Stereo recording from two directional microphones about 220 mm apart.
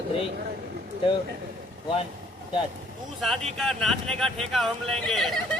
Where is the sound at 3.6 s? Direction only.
Centre (ahead or behind).